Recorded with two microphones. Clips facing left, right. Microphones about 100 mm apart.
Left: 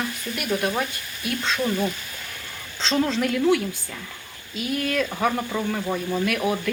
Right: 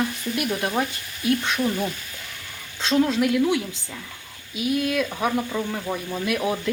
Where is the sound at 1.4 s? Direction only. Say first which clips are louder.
Even; 15° right (ahead or behind).